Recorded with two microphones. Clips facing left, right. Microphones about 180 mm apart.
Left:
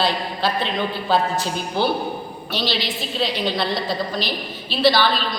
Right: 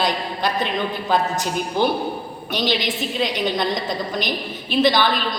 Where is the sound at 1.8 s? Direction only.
15° right (ahead or behind).